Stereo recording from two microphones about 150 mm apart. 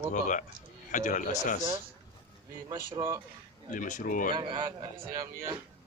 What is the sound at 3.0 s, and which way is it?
Speech, 25° right (ahead or behind).